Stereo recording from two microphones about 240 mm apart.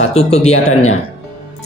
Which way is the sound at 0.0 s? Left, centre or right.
Left.